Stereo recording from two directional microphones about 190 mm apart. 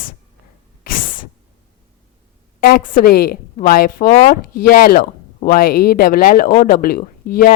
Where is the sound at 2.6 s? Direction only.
50° left (ahead or behind).